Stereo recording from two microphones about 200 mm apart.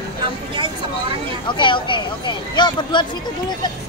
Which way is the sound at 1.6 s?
25° left (ahead or behind).